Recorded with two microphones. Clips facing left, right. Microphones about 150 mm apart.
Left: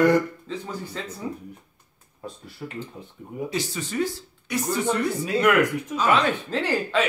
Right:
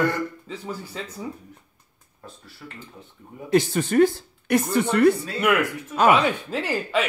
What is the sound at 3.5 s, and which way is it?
Speech, 55° right (ahead or behind).